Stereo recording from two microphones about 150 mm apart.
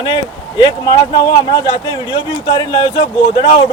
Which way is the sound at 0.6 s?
30° left (ahead or behind).